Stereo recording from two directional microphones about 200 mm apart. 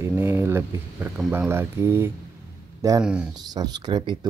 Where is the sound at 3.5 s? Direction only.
20° right (ahead or behind).